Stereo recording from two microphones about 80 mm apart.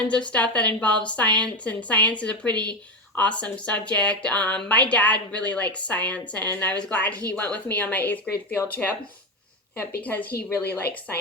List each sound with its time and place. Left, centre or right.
0.1 s speech: centre
9.7 s speech: left